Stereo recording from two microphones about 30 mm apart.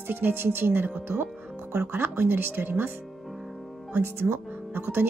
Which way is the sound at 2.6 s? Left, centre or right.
Right.